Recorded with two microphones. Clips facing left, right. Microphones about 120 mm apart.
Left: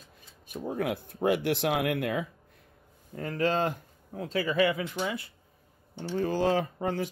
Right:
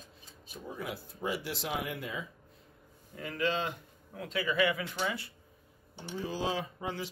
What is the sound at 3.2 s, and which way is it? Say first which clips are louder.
Speech: left 5 dB; 45° left (ahead or behind).